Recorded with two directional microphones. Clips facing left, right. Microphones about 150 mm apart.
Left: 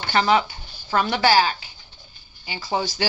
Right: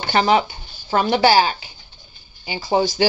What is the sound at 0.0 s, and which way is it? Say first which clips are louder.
Speech: right 3 dB; 20° right (ahead or behind).